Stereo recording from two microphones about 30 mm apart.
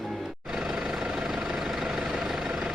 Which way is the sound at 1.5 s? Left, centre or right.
Centre.